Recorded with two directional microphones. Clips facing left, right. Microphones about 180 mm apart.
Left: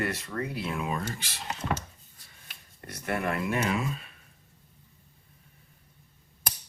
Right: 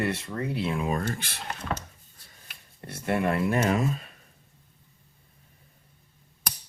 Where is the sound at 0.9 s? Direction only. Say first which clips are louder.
Right 4 dB; 50° right (ahead or behind).